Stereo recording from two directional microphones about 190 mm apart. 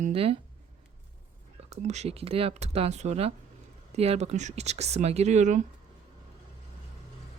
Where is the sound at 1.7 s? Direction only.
35° right (ahead or behind).